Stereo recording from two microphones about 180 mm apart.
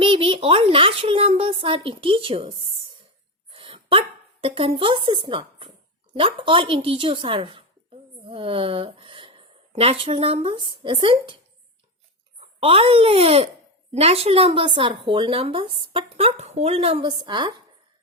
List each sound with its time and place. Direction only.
0.0 s a sound: 30° right (ahead or behind)
4.4 s a woman's voice: 30° right (ahead or behind)
12.5 s a woman's voice: 30° right (ahead or behind)